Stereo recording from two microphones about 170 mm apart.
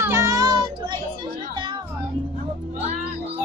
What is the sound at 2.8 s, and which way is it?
Music, 40° right (ahead or behind).